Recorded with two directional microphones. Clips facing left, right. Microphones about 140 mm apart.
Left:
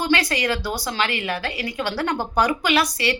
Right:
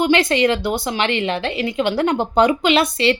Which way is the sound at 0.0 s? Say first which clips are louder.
Right 6 dB; 20° right (ahead or behind).